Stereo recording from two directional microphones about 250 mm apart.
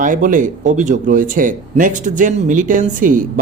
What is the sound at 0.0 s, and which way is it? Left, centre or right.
Speech, right.